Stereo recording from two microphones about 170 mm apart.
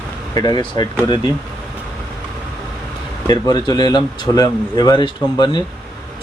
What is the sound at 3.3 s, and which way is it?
Speech, 25° left (ahead or behind).